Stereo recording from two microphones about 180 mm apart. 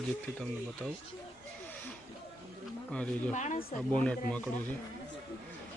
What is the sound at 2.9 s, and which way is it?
Speech, 5° left (ahead or behind).